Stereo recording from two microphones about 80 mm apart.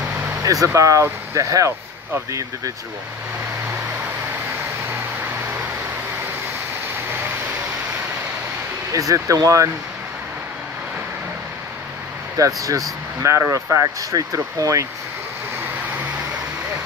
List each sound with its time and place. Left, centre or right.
0.4 s speech: right
8.9 s speech: right
12.4 s speech: right